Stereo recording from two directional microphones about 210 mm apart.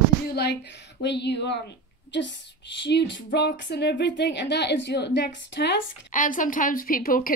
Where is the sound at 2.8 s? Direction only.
55° left (ahead or behind).